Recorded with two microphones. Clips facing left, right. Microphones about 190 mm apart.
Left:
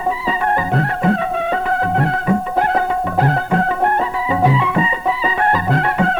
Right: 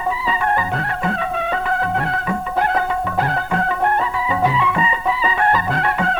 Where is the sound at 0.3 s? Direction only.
35° left (ahead or behind).